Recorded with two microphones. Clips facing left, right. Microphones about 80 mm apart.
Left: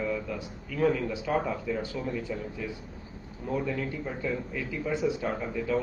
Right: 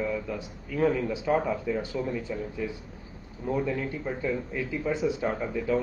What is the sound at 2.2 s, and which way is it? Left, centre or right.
Speech, right.